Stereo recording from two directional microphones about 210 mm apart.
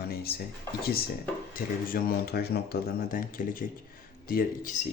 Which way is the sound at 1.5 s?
45° left (ahead or behind).